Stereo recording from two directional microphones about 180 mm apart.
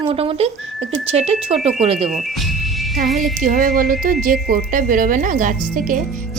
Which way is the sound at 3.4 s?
50° right (ahead or behind).